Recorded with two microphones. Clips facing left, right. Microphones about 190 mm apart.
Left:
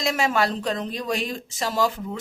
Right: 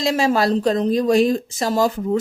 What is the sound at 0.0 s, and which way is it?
A woman's voice, 35° right (ahead or behind).